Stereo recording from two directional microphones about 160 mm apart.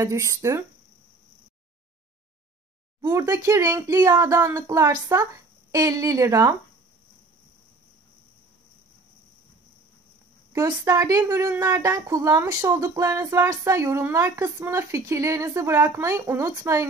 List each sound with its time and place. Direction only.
0.0 s a woman's voice: 20° right (ahead or behind)
3.0 s a woman's voice: 20° right (ahead or behind)
10.5 s a woman's voice: 20° right (ahead or behind)